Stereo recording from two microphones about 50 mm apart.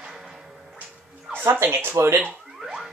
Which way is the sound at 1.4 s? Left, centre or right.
Right.